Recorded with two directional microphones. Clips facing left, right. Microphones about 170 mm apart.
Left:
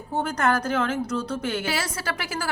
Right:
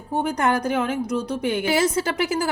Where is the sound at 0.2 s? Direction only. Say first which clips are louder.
Right 2 dB; 15° right (ahead or behind).